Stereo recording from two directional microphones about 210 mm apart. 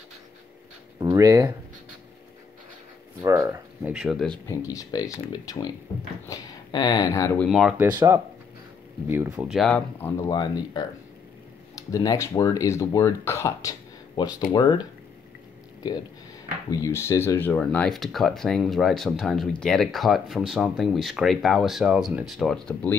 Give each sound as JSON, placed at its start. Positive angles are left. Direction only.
{"t": 0.9, "sound": "speech", "side_deg": -15}
{"t": 3.2, "sound": "speech", "side_deg": -15}
{"t": 4.5, "sound": "speech", "side_deg": 15}
{"t": 7.4, "sound": "speech", "side_deg": 0}
{"t": 9.1, "sound": "speech", "side_deg": -10}
{"t": 11.9, "sound": "speech", "side_deg": 15}
{"t": 16.8, "sound": "speech", "side_deg": 15}